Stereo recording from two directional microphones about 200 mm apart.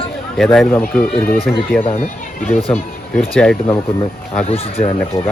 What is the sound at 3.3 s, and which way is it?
Speech, 5° left (ahead or behind).